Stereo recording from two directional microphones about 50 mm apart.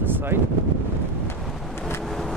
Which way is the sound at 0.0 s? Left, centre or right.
Right.